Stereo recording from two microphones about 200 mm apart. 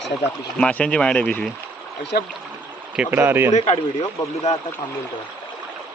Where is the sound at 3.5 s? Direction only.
35° left (ahead or behind).